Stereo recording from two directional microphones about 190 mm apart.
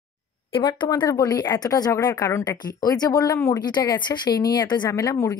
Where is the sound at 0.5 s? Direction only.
25° left (ahead or behind).